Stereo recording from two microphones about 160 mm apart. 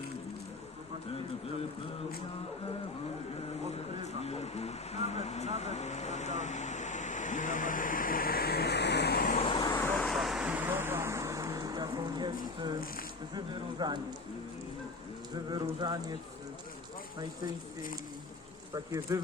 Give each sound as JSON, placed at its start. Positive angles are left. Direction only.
{"t": 4.0, "sound": "speech", "side_deg": 40}
{"t": 9.3, "sound": "vehicle", "side_deg": 40}
{"t": 10.0, "sound": "vehicle", "side_deg": 0}
{"t": 13.3, "sound": "speech", "side_deg": -25}
{"t": 15.4, "sound": "speech", "side_deg": -25}
{"t": 18.9, "sound": "speech", "side_deg": -20}